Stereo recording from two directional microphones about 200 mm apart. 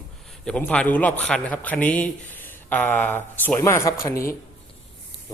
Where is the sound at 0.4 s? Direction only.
5° left (ahead or behind).